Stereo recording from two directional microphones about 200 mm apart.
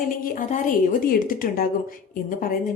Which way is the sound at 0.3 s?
40° left (ahead or behind).